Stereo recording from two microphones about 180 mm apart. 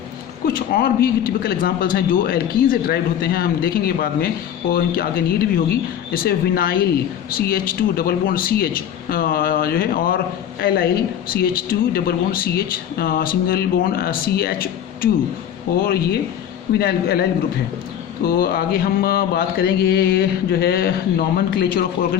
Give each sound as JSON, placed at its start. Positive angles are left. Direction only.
{"t": 0.4, "sound": "speech", "side_deg": 55}
{"t": 18.3, "sound": "speech", "side_deg": 55}